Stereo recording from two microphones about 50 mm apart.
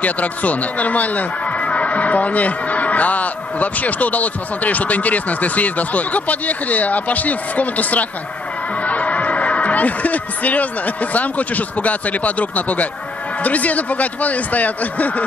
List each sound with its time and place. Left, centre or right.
0.0 s speech: left